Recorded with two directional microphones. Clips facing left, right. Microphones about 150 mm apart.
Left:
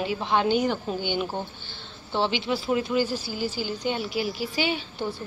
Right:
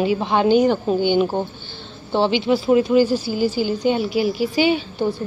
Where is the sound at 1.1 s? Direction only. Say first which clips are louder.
Right 10 dB; 45° right (ahead or behind).